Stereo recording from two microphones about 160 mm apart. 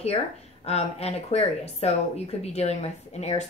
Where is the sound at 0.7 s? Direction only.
40° left (ahead or behind).